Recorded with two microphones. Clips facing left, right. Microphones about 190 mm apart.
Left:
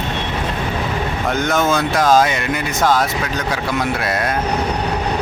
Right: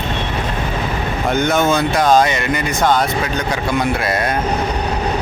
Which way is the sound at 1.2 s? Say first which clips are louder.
Right 2 dB; centre (ahead or behind).